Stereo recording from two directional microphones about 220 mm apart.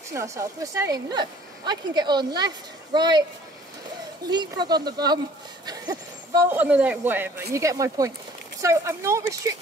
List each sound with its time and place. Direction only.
0.1 s speech: 15° right (ahead or behind)
4.3 s speech: 20° right (ahead or behind)